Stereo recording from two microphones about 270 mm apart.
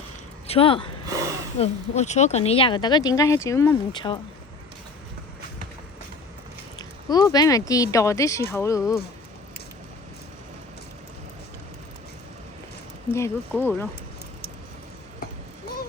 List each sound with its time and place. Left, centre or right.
0.4 s speech: left
6.7 s a sound: centre
7.7 s speech: centre
13.1 s speech: centre